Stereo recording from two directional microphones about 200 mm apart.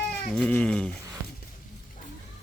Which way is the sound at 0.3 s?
5° left (ahead or behind).